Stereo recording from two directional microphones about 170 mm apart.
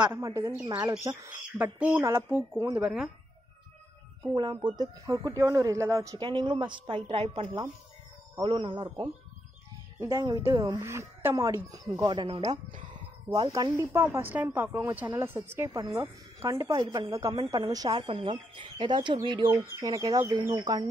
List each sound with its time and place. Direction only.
0.0 s speech: 20° right (ahead or behind)
4.3 s speech: 25° right (ahead or behind)
9.9 s speech: 15° right (ahead or behind)